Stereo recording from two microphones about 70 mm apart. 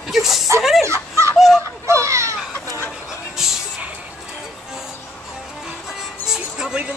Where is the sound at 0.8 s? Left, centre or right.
Right.